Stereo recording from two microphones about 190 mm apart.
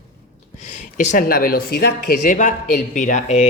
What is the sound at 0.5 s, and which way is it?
Speech, 35° left (ahead or behind).